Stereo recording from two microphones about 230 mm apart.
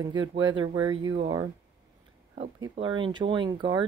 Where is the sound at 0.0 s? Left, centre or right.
Centre.